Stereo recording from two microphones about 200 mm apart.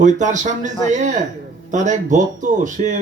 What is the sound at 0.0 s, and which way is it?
Speech, 35° right (ahead or behind).